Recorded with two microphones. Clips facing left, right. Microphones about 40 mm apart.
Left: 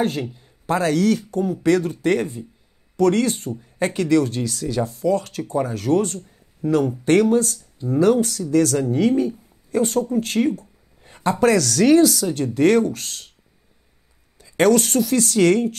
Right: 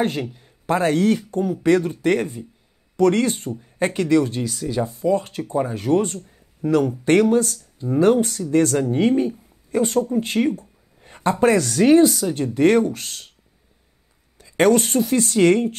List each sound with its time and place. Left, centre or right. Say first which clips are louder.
0.0 s speech: even; right
0.3 s a sound: right 1 dB; right
0.8 s speech: even; right
14.4 s speech: even; right